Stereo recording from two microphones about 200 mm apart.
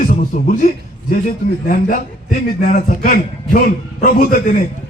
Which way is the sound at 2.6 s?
40° left (ahead or behind).